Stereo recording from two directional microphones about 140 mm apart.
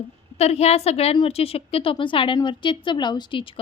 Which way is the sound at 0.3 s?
50° left (ahead or behind).